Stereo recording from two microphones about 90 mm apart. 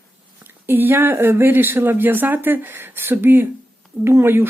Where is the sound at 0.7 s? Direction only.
25° right (ahead or behind).